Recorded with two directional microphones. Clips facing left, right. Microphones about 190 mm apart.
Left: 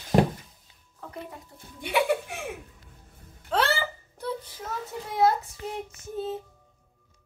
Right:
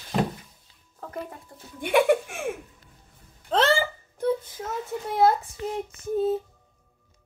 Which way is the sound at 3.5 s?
35° right (ahead or behind).